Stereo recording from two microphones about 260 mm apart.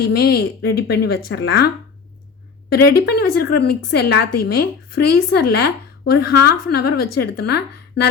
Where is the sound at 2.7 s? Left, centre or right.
Left.